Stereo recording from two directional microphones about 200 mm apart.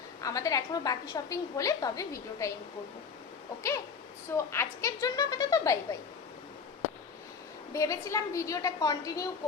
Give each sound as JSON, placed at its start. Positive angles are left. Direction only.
{"t": 0.2, "sound": "a woman's voice", "side_deg": 15}
{"t": 4.4, "sound": "a woman's voice", "side_deg": 15}
{"t": 7.7, "sound": "a woman's voice", "side_deg": 15}